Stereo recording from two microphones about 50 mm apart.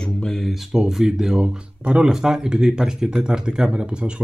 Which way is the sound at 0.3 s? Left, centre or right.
Centre.